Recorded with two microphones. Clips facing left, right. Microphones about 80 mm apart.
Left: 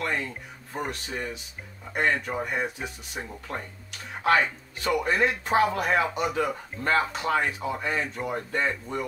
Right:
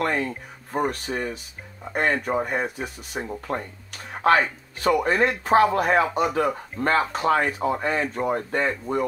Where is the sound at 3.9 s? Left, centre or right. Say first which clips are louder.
Right 4 dB; right.